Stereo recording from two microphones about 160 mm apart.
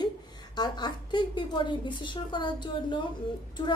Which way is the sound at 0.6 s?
25° left (ahead or behind).